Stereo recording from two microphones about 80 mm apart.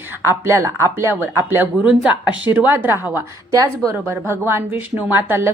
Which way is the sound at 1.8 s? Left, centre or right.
Centre.